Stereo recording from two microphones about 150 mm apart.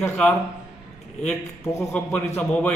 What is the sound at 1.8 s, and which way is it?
Speech, 10° left (ahead or behind).